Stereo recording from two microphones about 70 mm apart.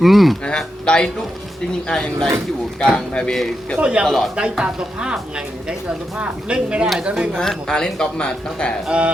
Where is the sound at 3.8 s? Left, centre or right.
Centre.